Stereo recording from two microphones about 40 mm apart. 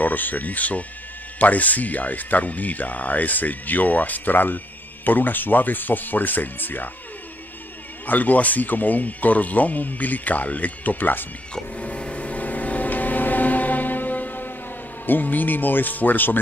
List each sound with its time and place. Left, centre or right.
0.0 s speech: left
8.1 s speech: left
11.7 s music: left
15.0 s speech: left